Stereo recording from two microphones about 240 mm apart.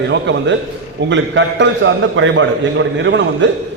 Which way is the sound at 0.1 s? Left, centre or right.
Right.